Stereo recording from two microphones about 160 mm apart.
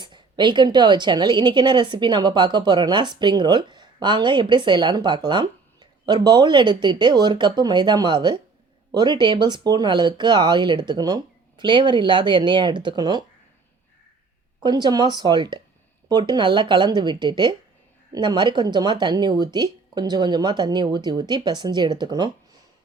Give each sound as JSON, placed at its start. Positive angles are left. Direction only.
{"t": 0.0, "sound": "a woman's voice", "side_deg": -30}
{"t": 14.6, "sound": "a woman's voice", "side_deg": -25}